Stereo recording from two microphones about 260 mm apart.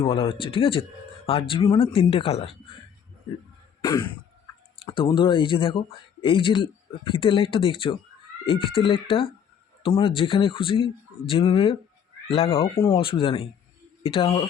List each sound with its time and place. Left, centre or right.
0.0 s speech: left
3.8 s throat clearing: centre
4.8 s speech: centre